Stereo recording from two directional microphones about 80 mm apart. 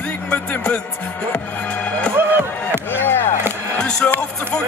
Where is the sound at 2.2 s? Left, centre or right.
Right.